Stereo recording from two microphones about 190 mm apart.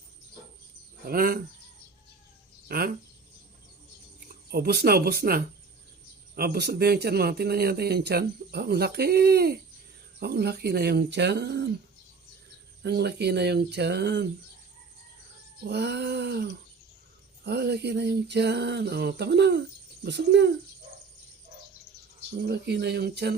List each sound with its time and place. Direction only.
1.0 s speech: 50° right (ahead or behind)
2.6 s speech: 50° right (ahead or behind)
4.5 s a man's voice: 55° right (ahead or behind)
12.8 s a man's voice: 60° right (ahead or behind)
15.6 s a man's voice: 60° right (ahead or behind)
22.4 s a man's voice: 60° right (ahead or behind)